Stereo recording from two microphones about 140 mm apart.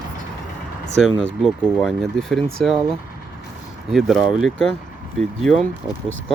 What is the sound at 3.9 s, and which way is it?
Speech, centre (ahead or behind).